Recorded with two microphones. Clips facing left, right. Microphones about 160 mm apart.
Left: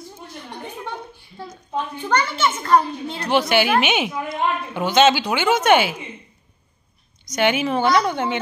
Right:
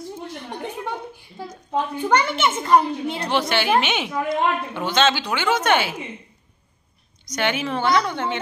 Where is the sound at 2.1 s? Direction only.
20° right (ahead or behind).